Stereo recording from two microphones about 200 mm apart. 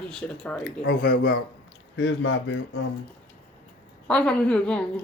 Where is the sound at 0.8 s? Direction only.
50° left (ahead or behind).